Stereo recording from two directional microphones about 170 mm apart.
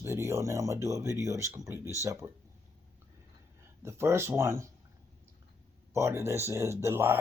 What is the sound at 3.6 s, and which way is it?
Speech, 15° right (ahead or behind).